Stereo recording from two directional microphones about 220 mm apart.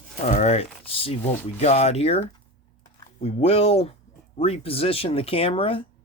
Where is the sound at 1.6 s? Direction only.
30° left (ahead or behind).